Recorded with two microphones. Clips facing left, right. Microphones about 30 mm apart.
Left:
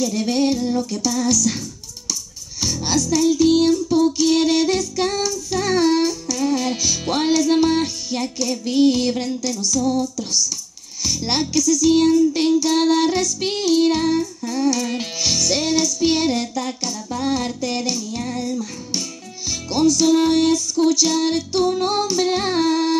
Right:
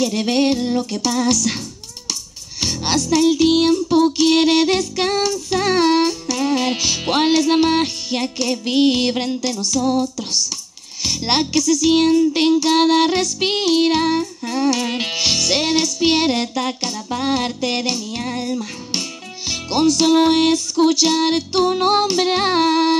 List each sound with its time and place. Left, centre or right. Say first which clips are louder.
0.0 s music: right 2 dB; right
2.6 s music: right 1 dB; right